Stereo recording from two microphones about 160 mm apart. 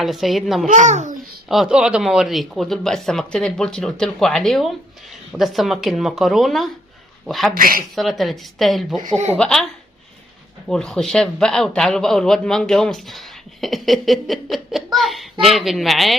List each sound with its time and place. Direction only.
0.0 s a man's voice: centre (ahead or behind)
0.7 s a child's voice: 50° right (ahead or behind)
1.5 s a man's voice: 5° right (ahead or behind)
7.5 s speech: 60° right (ahead or behind)
7.9 s a man's voice: centre (ahead or behind)
10.7 s a man's voice: 5° left (ahead or behind)